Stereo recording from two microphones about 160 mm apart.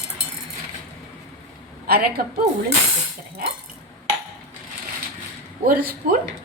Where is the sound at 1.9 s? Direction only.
75° right (ahead or behind).